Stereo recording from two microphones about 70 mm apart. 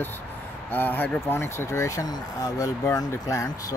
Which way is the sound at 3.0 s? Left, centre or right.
Left.